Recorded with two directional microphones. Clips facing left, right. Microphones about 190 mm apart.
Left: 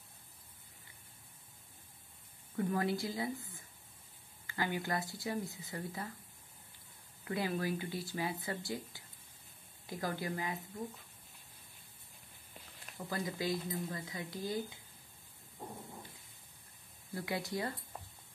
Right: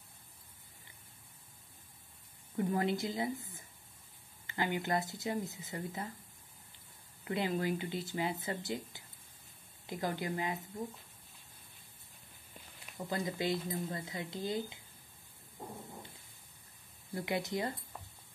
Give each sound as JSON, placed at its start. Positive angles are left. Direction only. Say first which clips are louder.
{"t": 2.5, "sound": "speech", "louder": "right 1 dB", "side_deg": -20}
{"t": 4.5, "sound": "speech", "louder": "right 2 dB", "side_deg": -20}
{"t": 7.2, "sound": "speech", "louder": "right 2 dB", "side_deg": -25}
{"t": 13.1, "sound": "speech", "louder": "right 2 dB", "side_deg": -25}
{"t": 17.1, "sound": "speech", "louder": "right 3 dB", "side_deg": -20}